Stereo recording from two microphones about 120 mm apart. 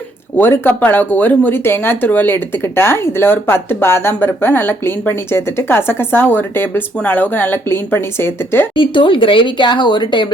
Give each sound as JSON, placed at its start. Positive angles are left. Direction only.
{"t": 0.3, "sound": "speech", "side_deg": 15}
{"t": 8.7, "sound": "speech", "side_deg": 45}